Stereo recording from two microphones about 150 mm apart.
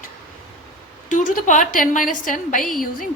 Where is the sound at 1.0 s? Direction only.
60° left (ahead or behind).